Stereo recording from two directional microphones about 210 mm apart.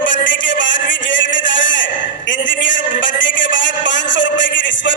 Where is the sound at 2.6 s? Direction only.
60° left (ahead or behind).